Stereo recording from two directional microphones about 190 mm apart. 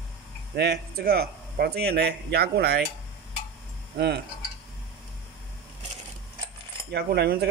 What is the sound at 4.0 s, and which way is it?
Speech, 60° right (ahead or behind).